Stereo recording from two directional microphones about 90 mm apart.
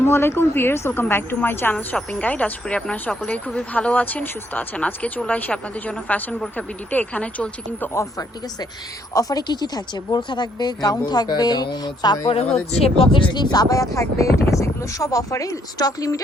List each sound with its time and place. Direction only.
0.0 s a woman's voice: 30° left (ahead or behind)
1.7 s a woman's voice: 10° left (ahead or behind)
9.1 s speech: 45° left (ahead or behind)
12.3 s speech: 90° left; by 16.2 s 40° left (ahead or behind)